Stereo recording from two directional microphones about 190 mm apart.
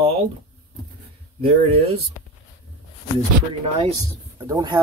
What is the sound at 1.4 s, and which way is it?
Speech, 30° right (ahead or behind).